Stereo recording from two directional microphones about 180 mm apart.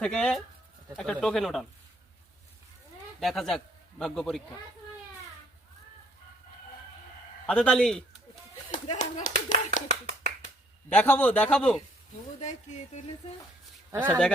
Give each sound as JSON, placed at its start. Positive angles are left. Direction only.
{"t": 0.0, "sound": "speech", "side_deg": 5}
{"t": 3.2, "sound": "a man's voice", "side_deg": 0}
{"t": 7.4, "sound": "speech", "side_deg": 5}
{"t": 8.7, "sound": "speech", "side_deg": 45}
{"t": 10.1, "sound": "finger snapping", "side_deg": -45}
{"t": 10.8, "sound": "a man's voice", "side_deg": 10}
{"t": 12.4, "sound": "speech", "side_deg": 40}
{"t": 13.9, "sound": "speech", "side_deg": -15}